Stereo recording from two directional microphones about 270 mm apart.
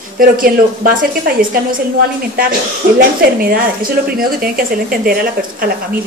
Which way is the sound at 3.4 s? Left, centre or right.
Right.